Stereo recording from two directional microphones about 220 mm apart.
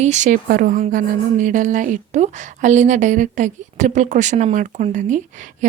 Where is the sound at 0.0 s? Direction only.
30° right (ahead or behind).